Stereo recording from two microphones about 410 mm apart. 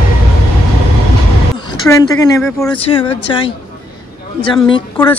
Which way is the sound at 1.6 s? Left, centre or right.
Centre.